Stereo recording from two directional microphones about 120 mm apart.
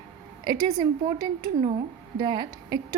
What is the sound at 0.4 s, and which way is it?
Speech, 35° right (ahead or behind).